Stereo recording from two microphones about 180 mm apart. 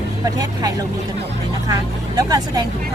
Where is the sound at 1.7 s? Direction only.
20° right (ahead or behind).